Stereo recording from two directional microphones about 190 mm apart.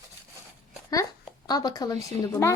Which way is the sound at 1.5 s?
20° left (ahead or behind).